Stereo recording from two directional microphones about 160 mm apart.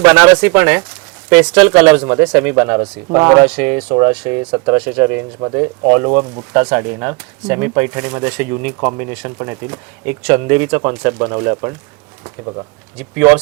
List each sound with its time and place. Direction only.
0.0 s speech: 10° right (ahead or behind)
3.2 s speech: 25° right (ahead or behind)
3.4 s speech: 10° right (ahead or behind)
13.0 s speech: 10° right (ahead or behind)